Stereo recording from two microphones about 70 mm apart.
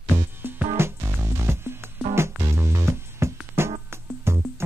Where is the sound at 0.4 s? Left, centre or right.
Right.